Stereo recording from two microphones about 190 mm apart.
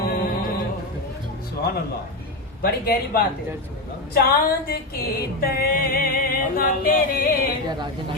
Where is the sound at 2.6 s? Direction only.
55° left (ahead or behind).